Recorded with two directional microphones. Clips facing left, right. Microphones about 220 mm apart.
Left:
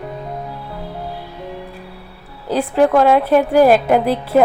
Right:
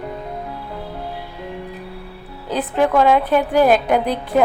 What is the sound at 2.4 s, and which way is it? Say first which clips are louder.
A woman's voice: left 4 dB; 5° left (ahead or behind).